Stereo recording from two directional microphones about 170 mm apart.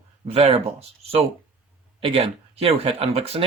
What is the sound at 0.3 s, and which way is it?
Speech, 40° right (ahead or behind).